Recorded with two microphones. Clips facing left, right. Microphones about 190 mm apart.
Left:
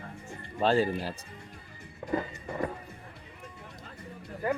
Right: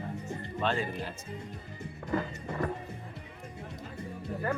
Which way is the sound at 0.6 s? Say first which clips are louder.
Left 7 dB; 35° left (ahead or behind).